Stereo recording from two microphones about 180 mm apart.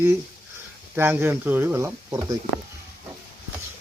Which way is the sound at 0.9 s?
10° right (ahead or behind).